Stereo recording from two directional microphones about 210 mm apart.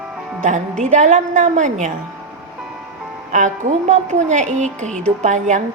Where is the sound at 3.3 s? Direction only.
35° right (ahead or behind).